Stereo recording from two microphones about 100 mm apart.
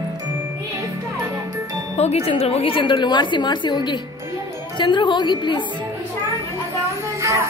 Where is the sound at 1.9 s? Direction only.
90° left; by 5.6 s 50° left (ahead or behind).